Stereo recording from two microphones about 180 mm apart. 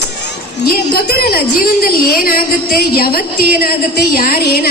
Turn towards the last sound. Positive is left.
turn(degrees=60)  # may be behind; listen again after turning